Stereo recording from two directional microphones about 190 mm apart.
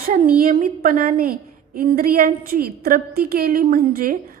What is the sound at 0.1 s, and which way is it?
A woman's voice, 50° right (ahead or behind).